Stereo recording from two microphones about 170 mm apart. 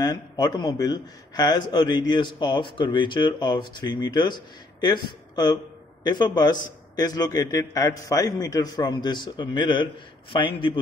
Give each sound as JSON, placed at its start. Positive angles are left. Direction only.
{"t": 0.0, "sound": "a man's voice", "side_deg": 25}